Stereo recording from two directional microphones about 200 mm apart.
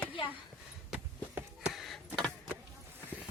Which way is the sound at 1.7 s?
Centre (ahead or behind).